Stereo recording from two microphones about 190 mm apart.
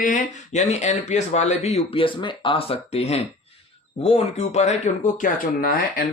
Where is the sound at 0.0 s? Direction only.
45° left (ahead or behind).